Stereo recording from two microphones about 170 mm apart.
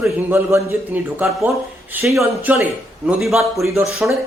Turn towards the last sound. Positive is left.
turn(degrees=-5)  # may be behind; listen again after turning